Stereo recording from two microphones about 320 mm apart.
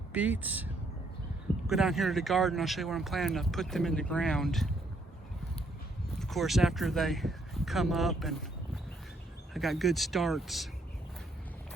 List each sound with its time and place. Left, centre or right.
0.1 s speech: centre
6.1 s speech: centre